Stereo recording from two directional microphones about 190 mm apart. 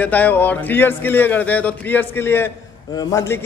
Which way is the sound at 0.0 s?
10° left (ahead or behind).